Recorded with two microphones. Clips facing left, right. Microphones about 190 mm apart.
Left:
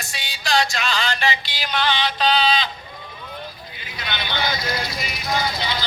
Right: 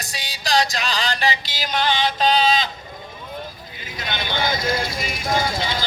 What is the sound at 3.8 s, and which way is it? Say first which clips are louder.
Vehicle: right 2 dB; 45° right (ahead or behind).